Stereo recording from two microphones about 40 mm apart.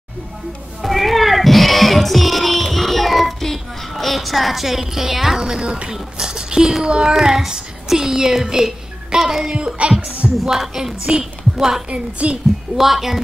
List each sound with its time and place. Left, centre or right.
0.8 s cat: centre
3.9 s a woman's voice: centre
6.9 s child singing: centre
9.5 s a woman's voice: centre
10.2 s music: centre
10.6 s a woman's voice: centre
11.9 s a woman's voice: right
12.7 s speech: centre